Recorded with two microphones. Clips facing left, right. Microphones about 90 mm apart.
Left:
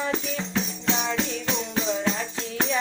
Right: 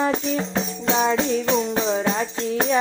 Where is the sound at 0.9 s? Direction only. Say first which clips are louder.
Right 7 dB; 50° right (ahead or behind).